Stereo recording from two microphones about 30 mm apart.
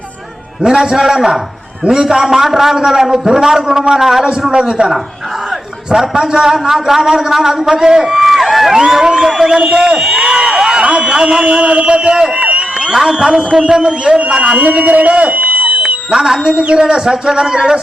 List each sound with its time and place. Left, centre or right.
0.6 s a man's voice: centre
4.8 s a man's voice: right
6.1 s a man's voice: right; by 8.7 s centre
8.9 s a man's voice: right
11.2 s a man's voice: right
12.4 s a sound: right
13.0 s a man's voice: right
14.6 s speech: right
15.1 s a sound: right
16.0 s a man's voice: centre